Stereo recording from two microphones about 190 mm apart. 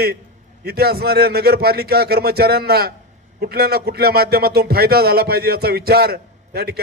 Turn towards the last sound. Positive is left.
turn(degrees=-55)  # may be behind; listen again after turning